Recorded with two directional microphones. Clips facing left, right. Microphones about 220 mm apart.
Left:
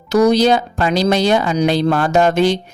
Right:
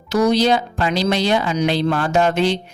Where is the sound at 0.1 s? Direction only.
45° left (ahead or behind).